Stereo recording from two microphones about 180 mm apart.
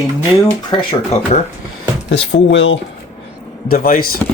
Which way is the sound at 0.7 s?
30° left (ahead or behind).